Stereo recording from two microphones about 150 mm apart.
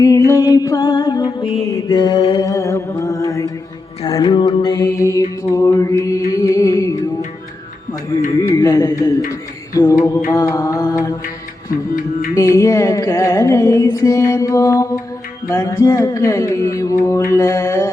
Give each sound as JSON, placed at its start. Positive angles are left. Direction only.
{"t": 0.0, "sound": "music", "side_deg": 20}
{"t": 8.5, "sound": "music", "side_deg": 25}
{"t": 12.3, "sound": "music", "side_deg": 20}